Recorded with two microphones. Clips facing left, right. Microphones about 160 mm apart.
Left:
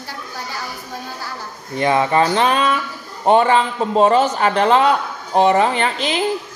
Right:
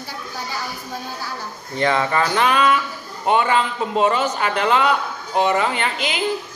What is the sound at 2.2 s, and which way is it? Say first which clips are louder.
Speech: left 2 dB; 30° left (ahead or behind).